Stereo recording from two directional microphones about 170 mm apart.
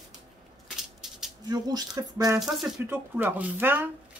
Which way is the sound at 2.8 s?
10° right (ahead or behind).